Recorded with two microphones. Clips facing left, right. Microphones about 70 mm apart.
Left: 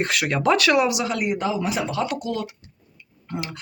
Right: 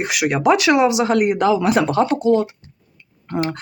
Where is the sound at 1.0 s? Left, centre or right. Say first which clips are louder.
Right 8 dB; right.